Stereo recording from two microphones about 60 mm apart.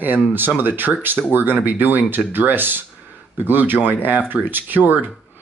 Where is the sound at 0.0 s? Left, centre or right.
Right.